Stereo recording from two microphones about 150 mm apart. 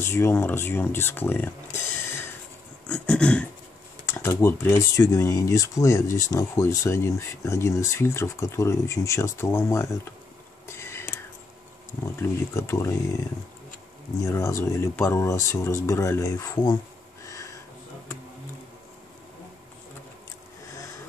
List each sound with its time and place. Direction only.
0.0 s speech: 15° left (ahead or behind)
2.9 s a sound: 5° left (ahead or behind)
4.0 s speech: 15° left (ahead or behind)
10.7 s whispering: 15° left (ahead or behind)
12.2 s speech: 20° left (ahead or behind)
14.2 s speech: 20° left (ahead or behind)